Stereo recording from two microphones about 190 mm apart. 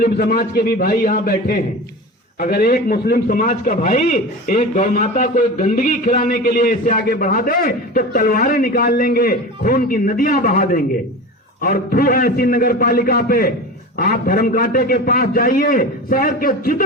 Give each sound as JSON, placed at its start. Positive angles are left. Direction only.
{"t": 0.0, "sound": "a man's voice", "side_deg": 50}